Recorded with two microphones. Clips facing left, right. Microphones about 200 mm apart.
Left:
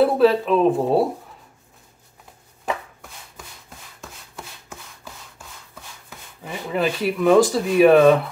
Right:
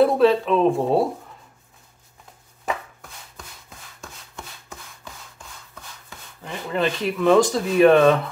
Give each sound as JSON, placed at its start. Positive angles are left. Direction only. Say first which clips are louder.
{"t": 0.0, "sound": "a woman's voice", "louder": "even", "side_deg": 5}
{"t": 2.6, "sound": "chopping", "louder": "left 1 dB", "side_deg": 0}
{"t": 4.0, "sound": "rub", "louder": "left 1 dB", "side_deg": 5}
{"t": 6.0, "sound": "speech", "louder": "left 1 dB", "side_deg": 10}